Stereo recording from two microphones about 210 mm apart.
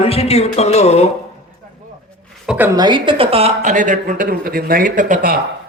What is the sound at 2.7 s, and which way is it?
Speech, 20° right (ahead or behind).